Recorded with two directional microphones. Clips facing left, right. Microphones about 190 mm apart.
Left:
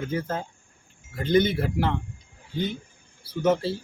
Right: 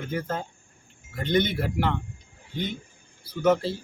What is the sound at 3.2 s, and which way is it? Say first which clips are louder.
Speech: right 1 dB; 30° left (ahead or behind).